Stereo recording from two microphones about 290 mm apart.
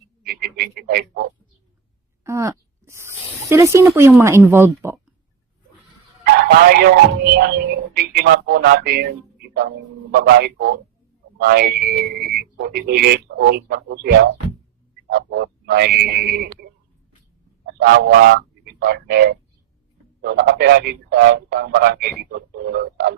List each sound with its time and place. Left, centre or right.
0.3 s frog: right
2.2 s a sound: centre
6.7 s speech: right
10.2 s speech: right
17.7 s speech: right